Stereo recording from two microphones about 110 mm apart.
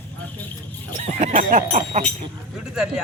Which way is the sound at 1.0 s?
90° right.